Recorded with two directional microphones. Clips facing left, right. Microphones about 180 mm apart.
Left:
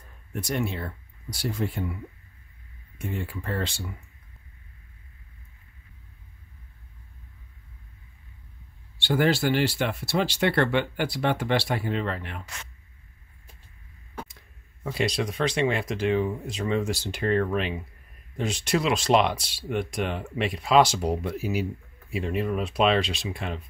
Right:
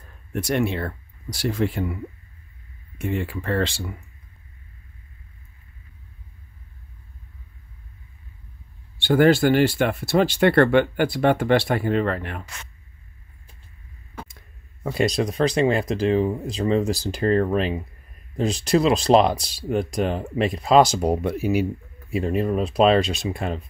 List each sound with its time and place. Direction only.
0.3 s speech: 75° right (ahead or behind); by 2.0 s 90° right
3.0 s speech: 90° right
8.9 s speech: 50° right (ahead or behind)
14.8 s speech: 50° right (ahead or behind)
22.1 s speech: 40° right (ahead or behind)